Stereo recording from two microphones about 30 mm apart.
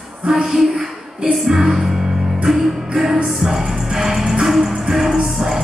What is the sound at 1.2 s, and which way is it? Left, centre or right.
Music, centre.